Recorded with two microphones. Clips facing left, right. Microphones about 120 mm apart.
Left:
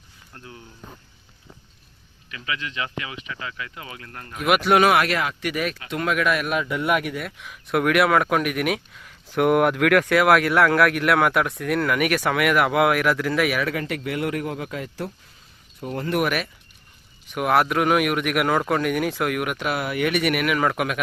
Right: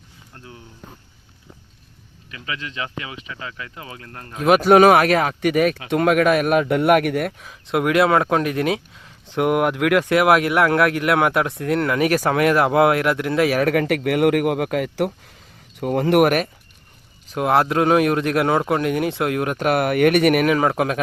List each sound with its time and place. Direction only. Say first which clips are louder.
0.3 s speech: right 1 dB; 20° right (ahead or behind)
2.3 s a man's voice: even; 30° right (ahead or behind); by 7.3 s 60° right (ahead or behind)
7.3 s speech: right 1 dB; 30° right (ahead or behind)
13.7 s speech: right 8 dB; 60° right (ahead or behind)
17.3 s speech: right 2 dB; 25° right (ahead or behind)
19.5 s speech: right 7 dB; 50° right (ahead or behind)
20.6 s speech: right 3 dB; 30° right (ahead or behind)